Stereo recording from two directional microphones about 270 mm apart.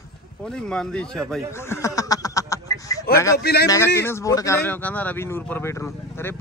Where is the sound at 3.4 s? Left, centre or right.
Left.